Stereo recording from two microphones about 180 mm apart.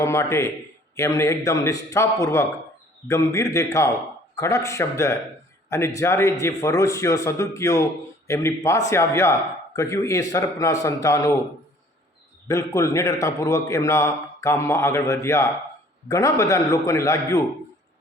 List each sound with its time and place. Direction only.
0.0 s a man's voice: 15° left (ahead or behind)
12.5 s a man's voice: 20° left (ahead or behind)